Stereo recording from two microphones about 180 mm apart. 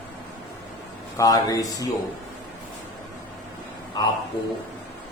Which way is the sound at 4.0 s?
25° left (ahead or behind).